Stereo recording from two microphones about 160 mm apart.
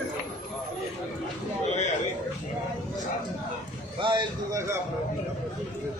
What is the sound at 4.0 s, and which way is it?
Speech, 30° right (ahead or behind).